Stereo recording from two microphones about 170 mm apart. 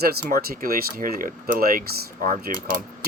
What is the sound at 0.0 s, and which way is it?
Speech, 65° right (ahead or behind).